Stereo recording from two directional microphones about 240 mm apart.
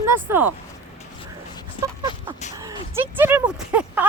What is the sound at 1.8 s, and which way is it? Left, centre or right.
Speech, left.